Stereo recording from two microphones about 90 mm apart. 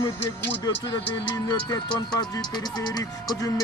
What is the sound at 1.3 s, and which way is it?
Speech, 55° left (ahead or behind).